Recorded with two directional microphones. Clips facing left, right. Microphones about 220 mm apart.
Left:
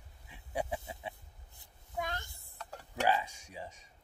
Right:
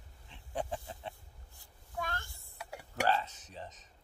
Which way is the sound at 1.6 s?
20° left (ahead or behind).